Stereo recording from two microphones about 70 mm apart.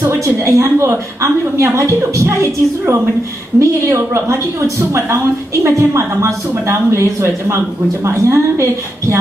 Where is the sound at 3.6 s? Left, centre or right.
Right.